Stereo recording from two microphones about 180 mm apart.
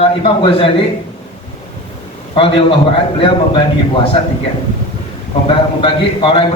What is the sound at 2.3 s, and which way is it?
Speech, 30° left (ahead or behind).